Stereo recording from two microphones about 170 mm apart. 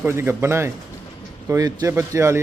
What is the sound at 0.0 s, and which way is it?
A man's voice, 15° right (ahead or behind).